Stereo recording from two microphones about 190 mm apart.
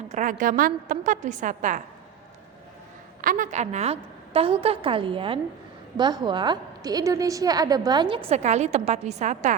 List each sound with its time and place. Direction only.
0.1 s a woman's voice: 40° right (ahead or behind)
3.2 s a woman's voice: 45° right (ahead or behind); by 8.2 s 25° right (ahead or behind)
8.3 s a woman's voice: 35° right (ahead or behind)